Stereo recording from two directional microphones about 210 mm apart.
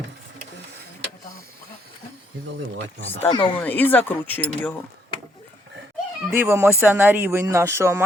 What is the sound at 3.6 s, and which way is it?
Speech, 10° left (ahead or behind).